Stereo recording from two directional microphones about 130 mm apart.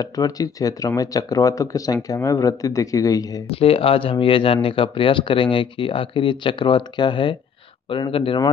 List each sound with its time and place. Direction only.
0.0 s speech: 30° left (ahead or behind)
3.4 s speech: 45° left (ahead or behind)